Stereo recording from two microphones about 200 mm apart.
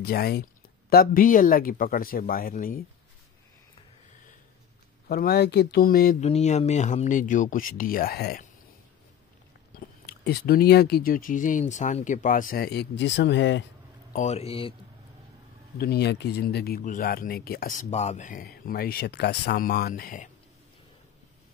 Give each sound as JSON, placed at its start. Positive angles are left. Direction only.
{"t": 0.0, "sound": "speech", "side_deg": 50}
{"t": 5.0, "sound": "speech", "side_deg": 50}
{"t": 6.2, "sound": "speech", "side_deg": 35}
{"t": 9.8, "sound": "speech", "side_deg": 55}
{"t": 14.1, "sound": "speech", "side_deg": 35}
{"t": 15.8, "sound": "speech", "side_deg": 55}